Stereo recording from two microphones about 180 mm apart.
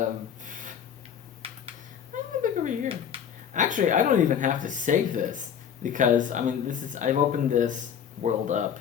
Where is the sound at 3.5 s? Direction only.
45° right (ahead or behind).